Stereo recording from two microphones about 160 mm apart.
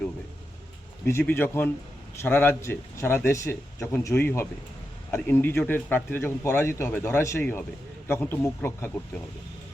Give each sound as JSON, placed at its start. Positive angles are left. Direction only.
{"t": 1.2, "sound": "a man's voice", "side_deg": 15}